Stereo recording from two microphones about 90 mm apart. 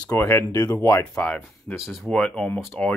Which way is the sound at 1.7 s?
Centre (ahead or behind).